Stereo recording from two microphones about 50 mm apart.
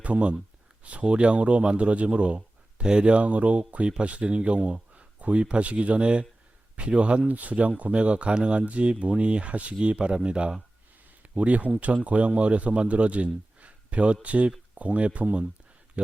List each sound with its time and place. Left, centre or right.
0.0 s a man's voice: right